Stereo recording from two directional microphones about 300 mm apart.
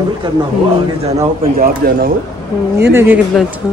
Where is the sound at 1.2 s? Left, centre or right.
Right.